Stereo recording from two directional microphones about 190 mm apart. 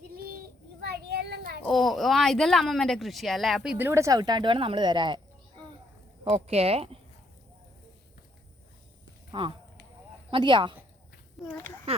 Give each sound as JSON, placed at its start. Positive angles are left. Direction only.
{"t": 0.8, "sound": "a sound", "side_deg": -60}
{"t": 1.6, "sound": "speech", "side_deg": 0}
{"t": 6.2, "sound": "speech", "side_deg": -35}
{"t": 9.3, "sound": "a woman's voice", "side_deg": -25}
{"t": 11.4, "sound": "speech", "side_deg": 10}